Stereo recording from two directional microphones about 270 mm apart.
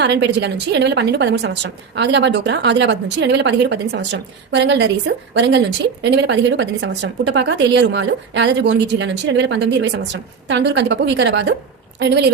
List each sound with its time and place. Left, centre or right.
0.0 s a woman's voice: right